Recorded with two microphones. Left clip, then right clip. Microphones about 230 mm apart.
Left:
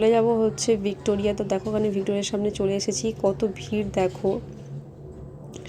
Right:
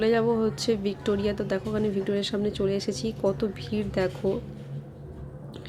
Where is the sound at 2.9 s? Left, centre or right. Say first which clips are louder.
Left 4 dB; right.